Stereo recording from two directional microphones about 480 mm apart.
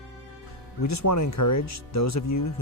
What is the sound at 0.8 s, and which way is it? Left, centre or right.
Speech, left.